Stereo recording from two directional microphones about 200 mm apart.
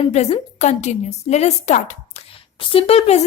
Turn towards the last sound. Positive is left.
turn(degrees=30)  # may be behind; listen again after turning